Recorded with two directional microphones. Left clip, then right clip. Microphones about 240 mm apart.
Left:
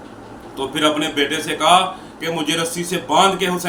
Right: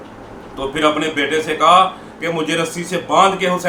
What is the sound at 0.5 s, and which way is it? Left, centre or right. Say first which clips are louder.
A man's voice: right 2 dB; centre.